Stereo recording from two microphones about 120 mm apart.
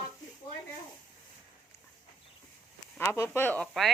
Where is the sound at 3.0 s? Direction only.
20° left (ahead or behind).